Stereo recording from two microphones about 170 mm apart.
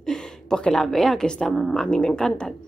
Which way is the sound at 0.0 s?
5° left (ahead or behind).